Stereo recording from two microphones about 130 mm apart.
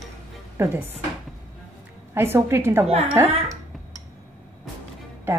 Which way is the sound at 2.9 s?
55° right (ahead or behind).